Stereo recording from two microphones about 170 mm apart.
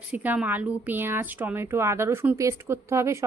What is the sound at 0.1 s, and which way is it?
A woman's voice, 10° right (ahead or behind).